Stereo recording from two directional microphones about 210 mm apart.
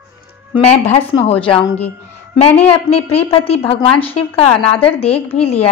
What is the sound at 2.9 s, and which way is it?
Speech, 30° left (ahead or behind).